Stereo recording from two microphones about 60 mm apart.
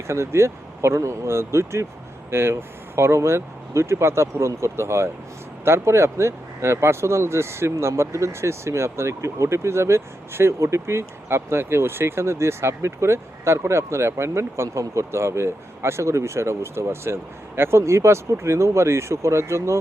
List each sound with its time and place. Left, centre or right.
0.1 s speech: right